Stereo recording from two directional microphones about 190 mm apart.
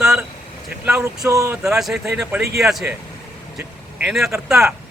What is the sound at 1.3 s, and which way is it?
Speech, 15° right (ahead or behind).